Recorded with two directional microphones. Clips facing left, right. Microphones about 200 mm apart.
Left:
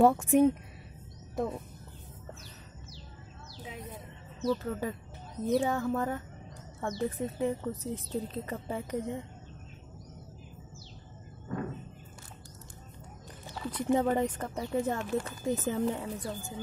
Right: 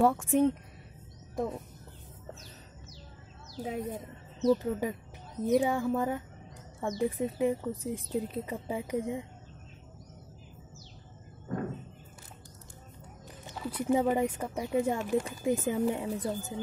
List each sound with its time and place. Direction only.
0.0 s speech: 25° left (ahead or behind)
0.3 s speech: 10° left (ahead or behind)
1.3 s speech: centre (ahead or behind)
3.6 s speech: 45° right (ahead or behind)
4.5 s speech: 15° right (ahead or behind)
13.6 s speech: 5° right (ahead or behind)